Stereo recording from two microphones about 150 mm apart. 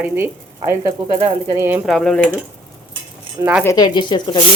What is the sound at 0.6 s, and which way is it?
Speech, 25° right (ahead or behind).